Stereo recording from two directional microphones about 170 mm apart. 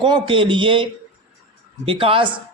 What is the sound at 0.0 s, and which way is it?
A man's voice, 30° right (ahead or behind).